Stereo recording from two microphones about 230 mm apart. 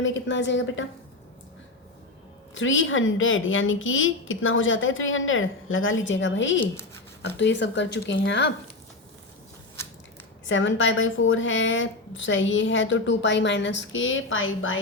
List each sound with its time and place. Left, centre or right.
0.0 s speech: left
2.6 s a woman's voice: left
10.5 s a woman's voice: left